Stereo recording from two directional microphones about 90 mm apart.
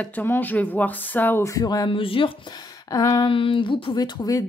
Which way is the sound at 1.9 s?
80° left.